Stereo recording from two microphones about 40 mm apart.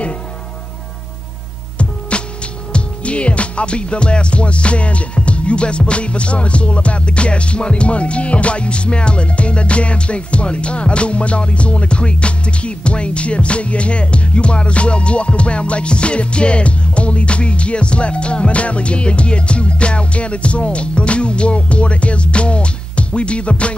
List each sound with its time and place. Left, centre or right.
1.8 s music: left